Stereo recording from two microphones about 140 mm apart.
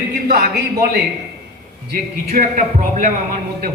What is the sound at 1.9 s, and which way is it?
A man's voice, 75° right (ahead or behind).